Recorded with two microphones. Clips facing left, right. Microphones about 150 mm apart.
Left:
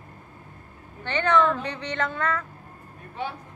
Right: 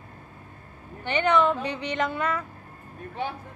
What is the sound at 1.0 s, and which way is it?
A woman's voice, 15° right (ahead or behind).